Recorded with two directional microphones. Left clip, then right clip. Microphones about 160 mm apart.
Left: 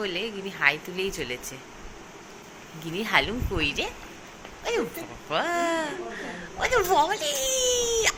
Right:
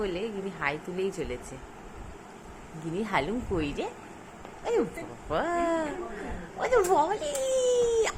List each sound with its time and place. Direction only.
0.0 s speech: 15° right (ahead or behind)
2.9 s speech: 20° right (ahead or behind)
5.3 s speech: 25° right (ahead or behind)